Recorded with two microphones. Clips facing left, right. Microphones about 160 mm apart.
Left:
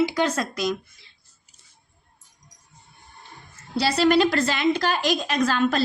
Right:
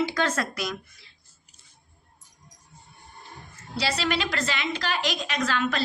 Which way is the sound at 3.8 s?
45° left (ahead or behind).